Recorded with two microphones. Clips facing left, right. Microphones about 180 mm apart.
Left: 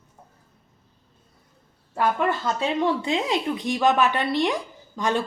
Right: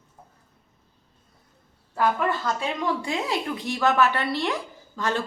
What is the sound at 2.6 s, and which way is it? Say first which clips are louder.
A woman's voice: left 4 dB; 25° left (ahead or behind).